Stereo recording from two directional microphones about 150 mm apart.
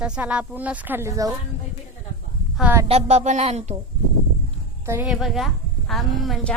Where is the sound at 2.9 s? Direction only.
45° right (ahead or behind).